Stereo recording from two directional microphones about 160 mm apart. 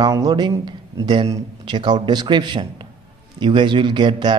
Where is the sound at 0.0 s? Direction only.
25° right (ahead or behind).